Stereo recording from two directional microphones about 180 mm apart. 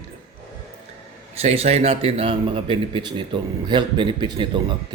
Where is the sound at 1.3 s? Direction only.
35° right (ahead or behind).